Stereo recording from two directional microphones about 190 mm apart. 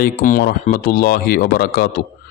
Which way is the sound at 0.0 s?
50° left (ahead or behind).